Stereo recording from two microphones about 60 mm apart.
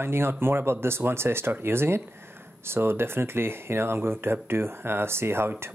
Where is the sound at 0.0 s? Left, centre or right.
Right.